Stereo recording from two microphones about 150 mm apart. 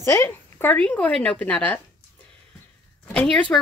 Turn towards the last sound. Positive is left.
turn(degrees=5)  # may be behind; listen again after turning